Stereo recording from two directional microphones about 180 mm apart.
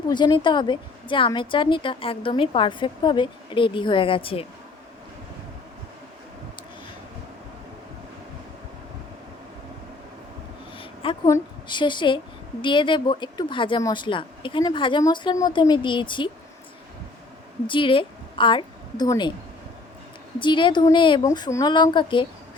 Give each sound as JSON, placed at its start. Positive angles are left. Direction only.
{"t": 0.1, "sound": "a woman's voice", "side_deg": 25}
{"t": 10.8, "sound": "a sound", "side_deg": 30}
{"t": 11.3, "sound": "a woman's voice", "side_deg": 25}
{"t": 17.7, "sound": "a woman's voice", "side_deg": 30}
{"t": 20.4, "sound": "a woman's voice", "side_deg": 25}